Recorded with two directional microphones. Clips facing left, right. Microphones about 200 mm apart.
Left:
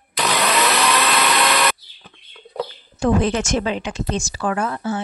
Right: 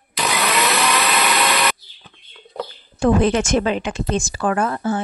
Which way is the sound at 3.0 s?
55° right (ahead or behind).